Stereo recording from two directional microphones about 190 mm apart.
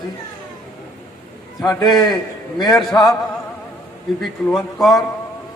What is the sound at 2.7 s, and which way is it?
Speech, centre (ahead or behind).